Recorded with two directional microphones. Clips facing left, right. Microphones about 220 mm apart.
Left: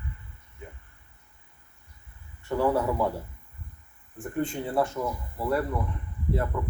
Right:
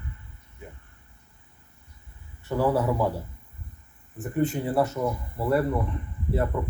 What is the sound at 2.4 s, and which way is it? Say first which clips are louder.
Speech: right 1 dB; 5° right (ahead or behind).